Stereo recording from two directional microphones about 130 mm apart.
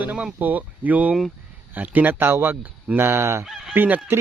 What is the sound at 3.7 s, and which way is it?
Speech, 15° right (ahead or behind).